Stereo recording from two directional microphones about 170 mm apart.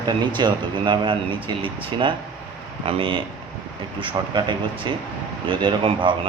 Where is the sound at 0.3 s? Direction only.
25° right (ahead or behind).